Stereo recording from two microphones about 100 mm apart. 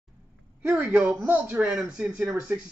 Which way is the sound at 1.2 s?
15° right (ahead or behind).